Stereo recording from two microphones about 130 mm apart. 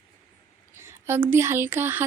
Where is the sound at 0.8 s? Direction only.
20° right (ahead or behind).